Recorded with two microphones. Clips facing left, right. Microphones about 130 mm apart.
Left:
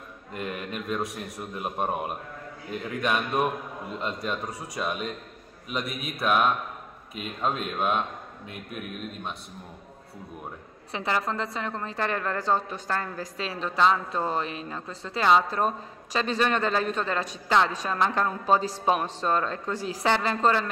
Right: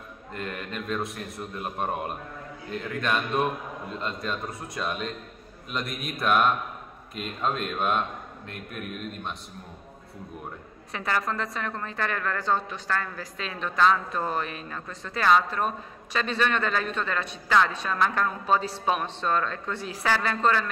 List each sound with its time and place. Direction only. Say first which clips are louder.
0.3 s speech: left 1 dB; 15° left (ahead or behind)
10.9 s a woman's voice: left 1 dB; 25° left (ahead or behind)
20.1 s a woman's voice: left 1 dB; 25° left (ahead or behind)